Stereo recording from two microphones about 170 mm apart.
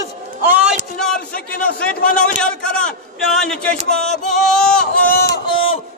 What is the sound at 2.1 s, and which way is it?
A man's voice, 5° left (ahead or behind).